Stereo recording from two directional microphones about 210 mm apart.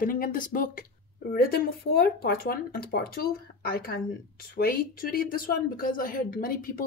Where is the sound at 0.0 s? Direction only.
40° left (ahead or behind).